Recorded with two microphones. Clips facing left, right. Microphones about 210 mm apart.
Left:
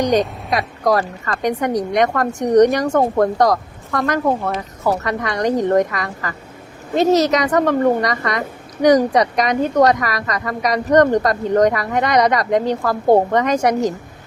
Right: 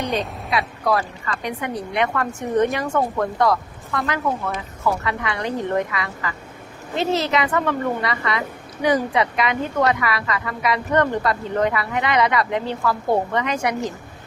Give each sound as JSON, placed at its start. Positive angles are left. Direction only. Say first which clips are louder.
{"t": 0.2, "sound": "a woman's voice", "louder": "left 5 dB", "side_deg": 40}